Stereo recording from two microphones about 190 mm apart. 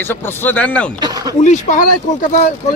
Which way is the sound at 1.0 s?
20° right (ahead or behind).